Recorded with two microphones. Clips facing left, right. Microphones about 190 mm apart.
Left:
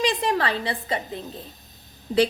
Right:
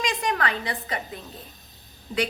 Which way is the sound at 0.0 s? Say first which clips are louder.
Left 3 dB; 30° left (ahead or behind).